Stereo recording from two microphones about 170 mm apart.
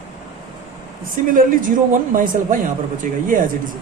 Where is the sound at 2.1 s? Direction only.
50° right (ahead or behind).